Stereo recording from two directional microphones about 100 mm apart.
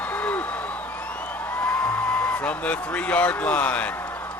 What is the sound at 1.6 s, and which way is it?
A man's voice, 15° left (ahead or behind).